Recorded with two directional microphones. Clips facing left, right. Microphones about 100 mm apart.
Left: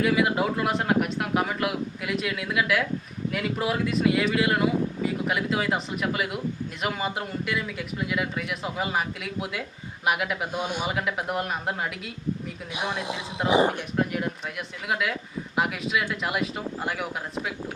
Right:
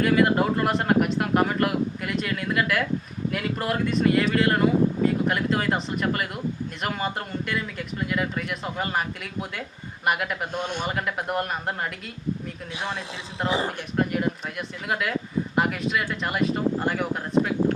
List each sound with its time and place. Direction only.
0.0 s speech: 5° left (ahead or behind)
12.7 s speech: 15° left (ahead or behind)
13.9 s speech: centre (ahead or behind)